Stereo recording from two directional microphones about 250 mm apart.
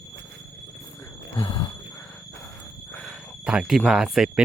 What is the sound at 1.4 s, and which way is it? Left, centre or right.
Squeal, centre.